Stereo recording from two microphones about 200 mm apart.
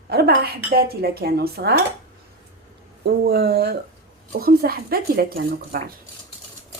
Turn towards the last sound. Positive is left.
turn(degrees=-50)  # may be behind; listen again after turning